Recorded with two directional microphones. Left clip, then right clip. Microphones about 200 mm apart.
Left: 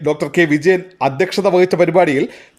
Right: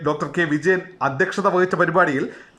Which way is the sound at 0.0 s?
15° left (ahead or behind).